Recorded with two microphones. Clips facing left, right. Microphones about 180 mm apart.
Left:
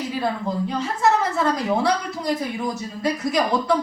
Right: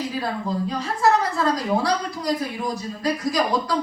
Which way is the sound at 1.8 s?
25° left (ahead or behind).